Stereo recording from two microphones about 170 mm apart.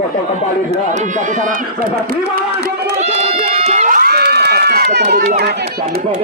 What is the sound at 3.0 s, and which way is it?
Crowd, 40° right (ahead or behind).